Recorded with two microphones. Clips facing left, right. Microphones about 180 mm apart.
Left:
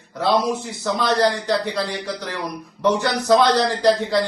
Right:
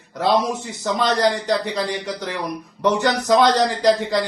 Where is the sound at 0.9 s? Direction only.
20° right (ahead or behind).